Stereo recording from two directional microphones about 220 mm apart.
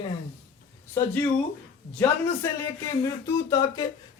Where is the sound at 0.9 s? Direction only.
5° left (ahead or behind).